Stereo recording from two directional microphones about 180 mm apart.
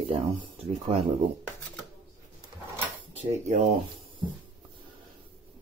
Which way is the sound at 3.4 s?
40° right (ahead or behind).